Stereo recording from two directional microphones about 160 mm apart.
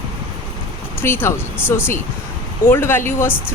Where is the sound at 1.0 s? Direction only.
15° left (ahead or behind).